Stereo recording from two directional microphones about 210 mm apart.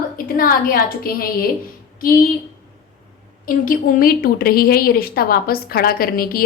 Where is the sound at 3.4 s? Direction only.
40° left (ahead or behind).